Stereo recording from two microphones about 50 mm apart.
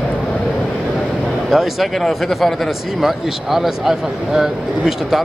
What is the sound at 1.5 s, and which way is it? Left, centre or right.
Speech, centre.